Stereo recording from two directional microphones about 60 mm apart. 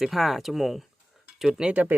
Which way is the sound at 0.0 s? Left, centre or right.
Centre.